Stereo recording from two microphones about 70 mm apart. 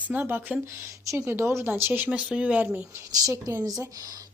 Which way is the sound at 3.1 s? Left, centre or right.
Right.